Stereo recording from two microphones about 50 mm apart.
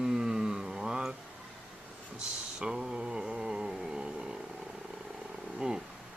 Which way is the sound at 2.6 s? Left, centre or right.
Centre.